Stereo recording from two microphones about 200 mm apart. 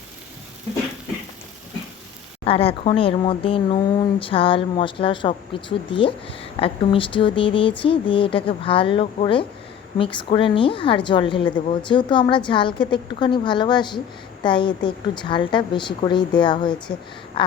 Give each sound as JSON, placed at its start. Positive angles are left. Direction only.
{"t": 2.5, "sound": "speech", "side_deg": 30}